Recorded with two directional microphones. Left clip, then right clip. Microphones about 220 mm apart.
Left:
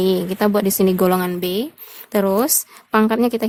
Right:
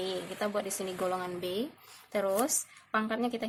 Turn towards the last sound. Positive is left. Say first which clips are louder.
# left 14 dB
turn(degrees=50)  # may be behind; listen again after turning